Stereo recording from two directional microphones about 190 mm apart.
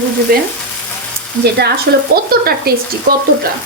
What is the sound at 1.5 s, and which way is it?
A woman's voice, 55° right (ahead or behind).